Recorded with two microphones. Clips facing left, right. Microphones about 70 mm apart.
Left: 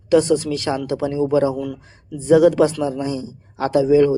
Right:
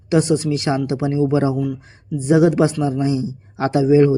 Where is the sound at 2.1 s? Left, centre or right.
Right.